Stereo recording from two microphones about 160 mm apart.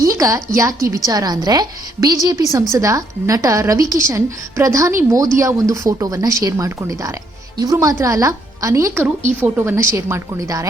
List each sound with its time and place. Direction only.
0.0 s a woman's voice: 20° right (ahead or behind)